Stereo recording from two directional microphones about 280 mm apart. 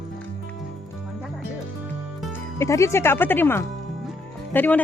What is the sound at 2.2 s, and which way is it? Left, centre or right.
Speech, centre.